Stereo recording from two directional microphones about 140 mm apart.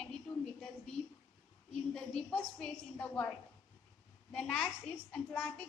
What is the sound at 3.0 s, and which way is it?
A woman's voice, 10° left (ahead or behind).